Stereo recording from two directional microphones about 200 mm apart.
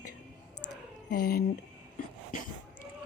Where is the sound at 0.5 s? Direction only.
90° left.